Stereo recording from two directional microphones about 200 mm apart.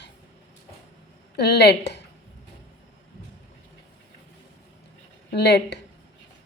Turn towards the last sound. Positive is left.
turn(degrees=55)  # may be behind; listen again after turning